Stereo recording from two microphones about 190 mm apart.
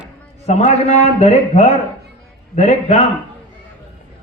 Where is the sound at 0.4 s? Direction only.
35° left (ahead or behind).